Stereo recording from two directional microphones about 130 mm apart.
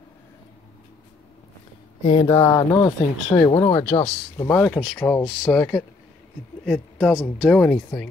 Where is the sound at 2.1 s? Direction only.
25° left (ahead or behind).